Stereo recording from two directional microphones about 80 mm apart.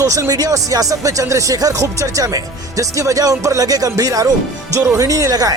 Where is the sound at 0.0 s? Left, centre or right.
Right.